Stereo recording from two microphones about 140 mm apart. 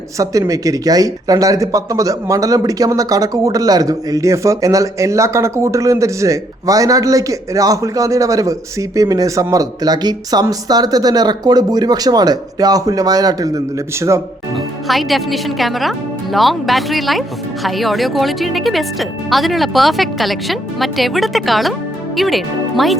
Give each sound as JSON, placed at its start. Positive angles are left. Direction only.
{"t": 0.2, "sound": "speech", "side_deg": -25}
{"t": 14.5, "sound": "speech", "side_deg": 0}